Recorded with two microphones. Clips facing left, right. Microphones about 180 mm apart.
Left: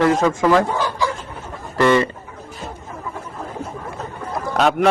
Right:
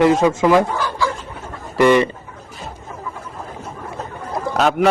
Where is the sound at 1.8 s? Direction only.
15° right (ahead or behind).